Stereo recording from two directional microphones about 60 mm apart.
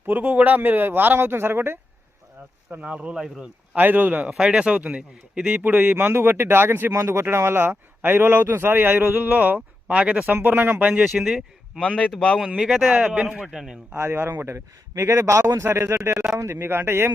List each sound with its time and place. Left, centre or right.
0.0 s speech: right
2.8 s speech: centre
3.8 s speech: right
4.3 s speech: centre
5.5 s speech: right
11.0 s a man's voice: centre
11.8 s speech: centre
12.5 s speech: centre
13.0 s speech: right
13.4 s speech: centre
13.9 s speech: right
14.4 s a man's voice: right
15.6 s speech: right